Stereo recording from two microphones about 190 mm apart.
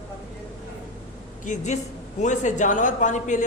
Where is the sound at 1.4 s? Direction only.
40° left (ahead or behind).